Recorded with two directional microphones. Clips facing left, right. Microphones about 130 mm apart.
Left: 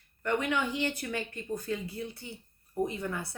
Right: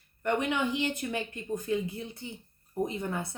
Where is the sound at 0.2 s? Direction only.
20° right (ahead or behind).